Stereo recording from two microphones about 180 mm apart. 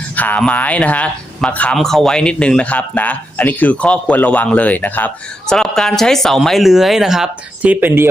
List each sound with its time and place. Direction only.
0.2 s speech: 10° left (ahead or behind); by 8.0 s 10° right (ahead or behind)